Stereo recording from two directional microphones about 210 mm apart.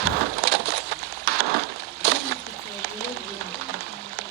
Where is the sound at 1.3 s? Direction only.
50° right (ahead or behind).